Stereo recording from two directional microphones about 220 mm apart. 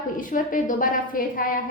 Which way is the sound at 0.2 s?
40° left (ahead or behind).